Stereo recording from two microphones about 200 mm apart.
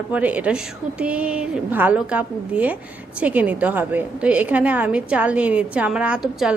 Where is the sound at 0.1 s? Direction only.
5° right (ahead or behind).